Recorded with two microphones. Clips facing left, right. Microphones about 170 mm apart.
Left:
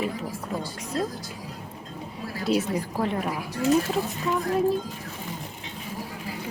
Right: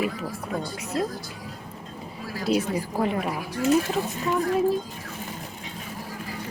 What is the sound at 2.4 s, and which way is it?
Speech, centre (ahead or behind).